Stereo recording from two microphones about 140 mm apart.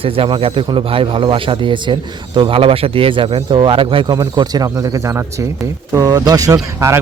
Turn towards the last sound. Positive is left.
turn(degrees=-25)  # may be behind; listen again after turning